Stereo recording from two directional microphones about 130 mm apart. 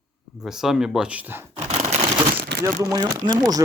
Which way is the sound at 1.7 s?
55° right (ahead or behind).